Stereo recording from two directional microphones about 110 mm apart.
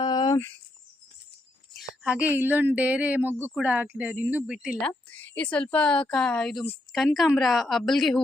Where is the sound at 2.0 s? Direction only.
15° right (ahead or behind).